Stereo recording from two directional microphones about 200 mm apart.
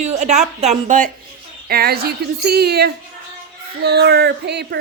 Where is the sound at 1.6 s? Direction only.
50° right (ahead or behind).